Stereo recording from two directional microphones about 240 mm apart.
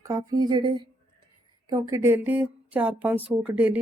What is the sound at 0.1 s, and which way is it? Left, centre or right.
Speech, centre.